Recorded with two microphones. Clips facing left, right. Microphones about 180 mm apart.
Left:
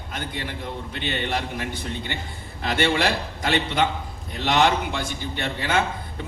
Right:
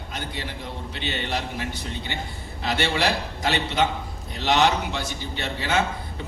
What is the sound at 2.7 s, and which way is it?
A man's voice, 50° left (ahead or behind).